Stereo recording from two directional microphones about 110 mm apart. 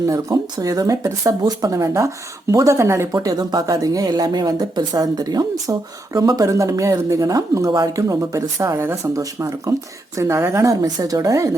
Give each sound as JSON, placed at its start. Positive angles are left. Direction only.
{"t": 0.1, "sound": "speech", "side_deg": -35}
{"t": 3.2, "sound": "speech", "side_deg": -35}